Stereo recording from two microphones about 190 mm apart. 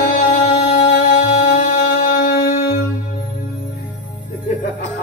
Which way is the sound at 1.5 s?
45° left (ahead or behind).